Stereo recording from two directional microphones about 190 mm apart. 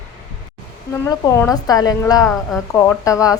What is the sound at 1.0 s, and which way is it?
A woman's voice, 15° left (ahead or behind).